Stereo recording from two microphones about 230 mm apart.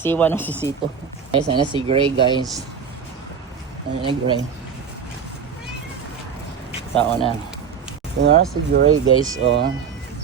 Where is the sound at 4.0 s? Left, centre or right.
Right.